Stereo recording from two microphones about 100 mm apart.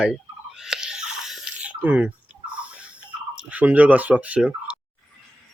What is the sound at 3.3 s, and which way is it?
Speech, 15° right (ahead or behind).